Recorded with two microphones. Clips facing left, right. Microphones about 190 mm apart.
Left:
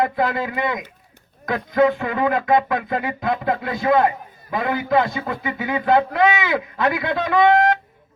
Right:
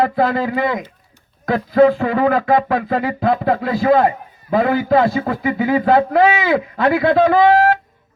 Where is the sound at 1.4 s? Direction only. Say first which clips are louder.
Right 5 dB; 30° right (ahead or behind).